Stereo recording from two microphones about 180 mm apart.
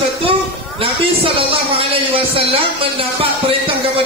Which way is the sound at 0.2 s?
30° right (ahead or behind).